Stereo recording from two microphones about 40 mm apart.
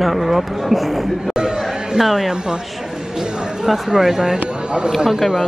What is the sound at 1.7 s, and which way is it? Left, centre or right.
Chatter, centre.